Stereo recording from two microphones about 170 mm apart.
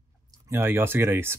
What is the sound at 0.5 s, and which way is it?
Speech, 15° right (ahead or behind).